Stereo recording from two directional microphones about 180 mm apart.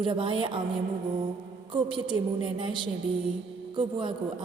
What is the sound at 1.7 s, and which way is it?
A woman's voice, 30° right (ahead or behind).